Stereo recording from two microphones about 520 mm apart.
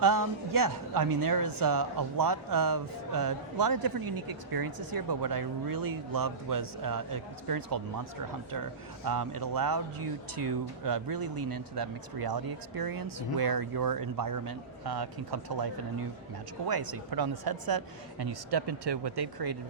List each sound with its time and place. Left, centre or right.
0.0 s speech: right
9.0 s speech: right
10.8 s speech: right
16.6 s speech: right